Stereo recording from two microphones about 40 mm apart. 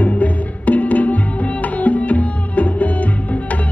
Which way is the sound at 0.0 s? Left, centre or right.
Left.